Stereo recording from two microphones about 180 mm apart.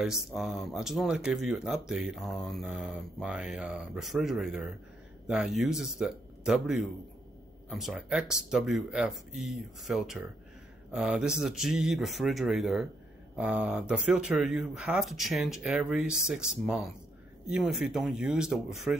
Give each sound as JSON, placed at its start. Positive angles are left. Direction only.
{"t": 0.0, "sound": "speech", "side_deg": 0}